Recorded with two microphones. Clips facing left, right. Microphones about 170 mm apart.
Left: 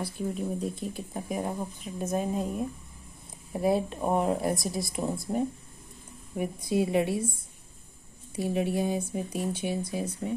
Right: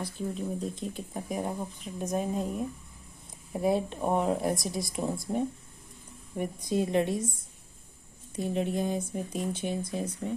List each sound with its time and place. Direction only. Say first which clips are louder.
0.0 s speech: left 2 dB; 10° left (ahead or behind)
8.4 s speech: left 2 dB; 10° left (ahead or behind)